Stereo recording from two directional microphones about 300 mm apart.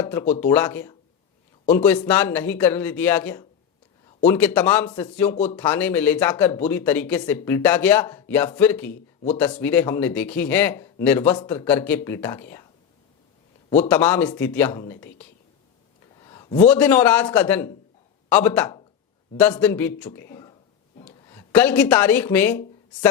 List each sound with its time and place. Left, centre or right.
0.1 s speech: centre
8.9 s speech: left
9.4 s speech: centre
13.8 s speech: centre
16.1 s a sound: centre
16.6 s speech: centre